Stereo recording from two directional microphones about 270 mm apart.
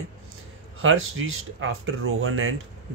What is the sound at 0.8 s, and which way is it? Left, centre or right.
Speech, right.